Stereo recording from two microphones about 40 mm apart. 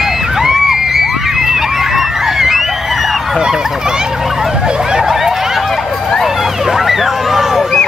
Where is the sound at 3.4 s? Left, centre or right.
Centre.